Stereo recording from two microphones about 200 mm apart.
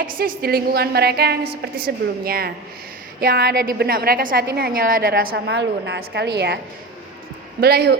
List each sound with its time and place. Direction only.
0.4 s a woman's voice: 50° right (ahead or behind)
7.6 s a woman's voice: 55° right (ahead or behind)